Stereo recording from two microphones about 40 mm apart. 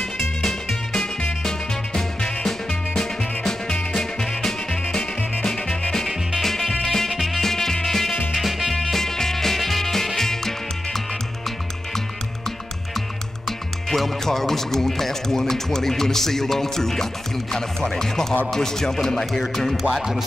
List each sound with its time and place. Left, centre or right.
0.0 s music: centre
6.0 s music: centre
8.3 s music: centre
9.0 s music: centre
13.5 s speech: centre
19.9 s speech: centre